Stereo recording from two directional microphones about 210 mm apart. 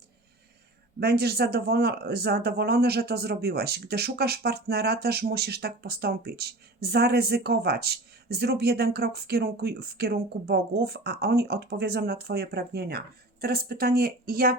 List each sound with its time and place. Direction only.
0.9 s speech: 50° right (ahead or behind)